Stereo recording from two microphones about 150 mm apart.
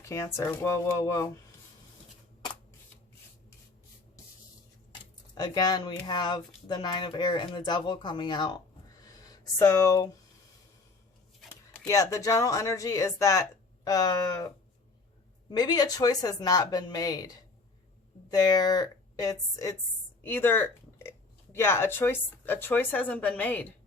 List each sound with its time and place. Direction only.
0.0 s speech: 20° left (ahead or behind)
5.3 s speech: 25° left (ahead or behind)
11.9 s speech: 20° left (ahead or behind)
15.4 s a woman's voice: 25° left (ahead or behind)
20.2 s speech: 15° left (ahead or behind)